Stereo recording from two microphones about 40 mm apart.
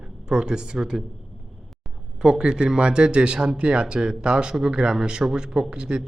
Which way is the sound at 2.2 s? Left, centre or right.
Centre.